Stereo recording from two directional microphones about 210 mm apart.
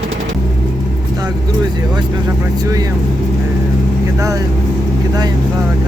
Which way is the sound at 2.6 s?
15° right (ahead or behind).